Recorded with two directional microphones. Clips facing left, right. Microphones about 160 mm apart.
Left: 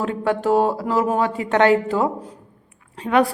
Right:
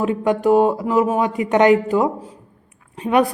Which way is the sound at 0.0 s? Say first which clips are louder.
Right 3 dB; 15° right (ahead or behind).